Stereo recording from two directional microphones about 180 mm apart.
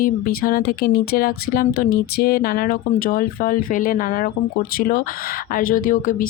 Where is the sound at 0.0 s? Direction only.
55° left (ahead or behind).